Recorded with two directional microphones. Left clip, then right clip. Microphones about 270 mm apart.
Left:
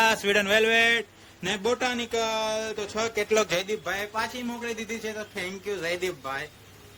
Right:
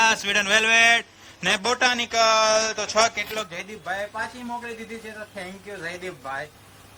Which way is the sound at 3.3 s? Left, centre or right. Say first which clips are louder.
Left 7 dB; left.